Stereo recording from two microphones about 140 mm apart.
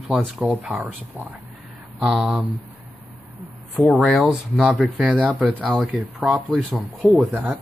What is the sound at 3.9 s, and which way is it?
Speech, centre (ahead or behind).